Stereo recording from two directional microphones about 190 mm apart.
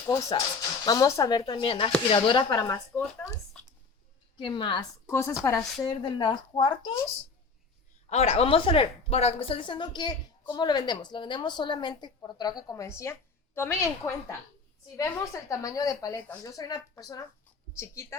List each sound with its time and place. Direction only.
0.1 s a woman's voice: 20° left (ahead or behind)
4.4 s a woman's voice: 25° left (ahead or behind)
8.1 s a woman's voice: 35° left (ahead or behind); by 18.2 s 15° left (ahead or behind)